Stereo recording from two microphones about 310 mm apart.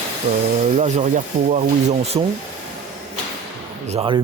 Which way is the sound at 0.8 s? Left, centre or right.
Right.